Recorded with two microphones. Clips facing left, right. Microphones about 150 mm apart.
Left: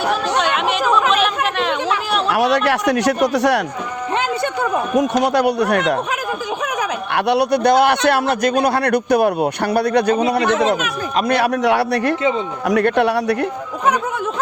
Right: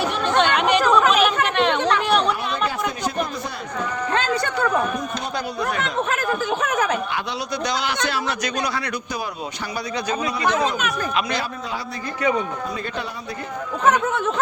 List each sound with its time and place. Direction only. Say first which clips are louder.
0.1 s chatter: left 2 dB; centre (ahead or behind)
2.3 s speech: left 9 dB; 85° left
4.1 s speech: left 3 dB; 15° left (ahead or behind)
4.9 s speech: left 12 dB; 85° left
7.1 s a man's voice: left 11 dB; 65° left (ahead or behind)
11.3 s speech: left 11 dB; 70° left (ahead or behind)